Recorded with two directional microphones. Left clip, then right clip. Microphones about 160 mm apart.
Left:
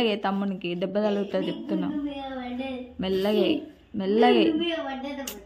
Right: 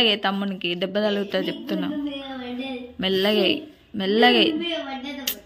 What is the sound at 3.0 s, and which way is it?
A woman's voice, centre (ahead or behind).